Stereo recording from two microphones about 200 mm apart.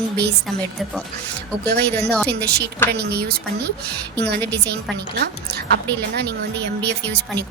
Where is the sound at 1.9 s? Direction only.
5° left (ahead or behind).